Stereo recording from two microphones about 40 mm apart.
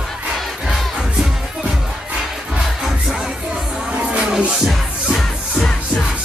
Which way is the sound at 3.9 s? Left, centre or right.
Right.